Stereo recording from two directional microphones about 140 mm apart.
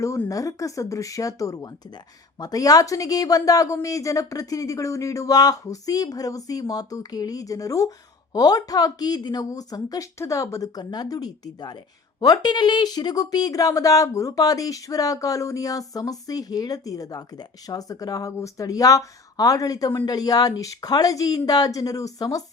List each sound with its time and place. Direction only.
0.0 s speech: 20° left (ahead or behind)